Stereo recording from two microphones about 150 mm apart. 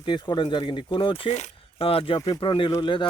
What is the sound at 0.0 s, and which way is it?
Speech, 30° left (ahead or behind).